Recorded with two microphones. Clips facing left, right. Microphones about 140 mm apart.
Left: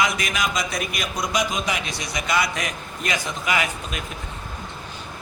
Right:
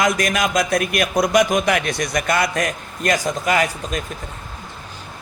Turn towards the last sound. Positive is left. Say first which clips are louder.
# right 5 dB
turn(degrees=-40)  # may be behind; listen again after turning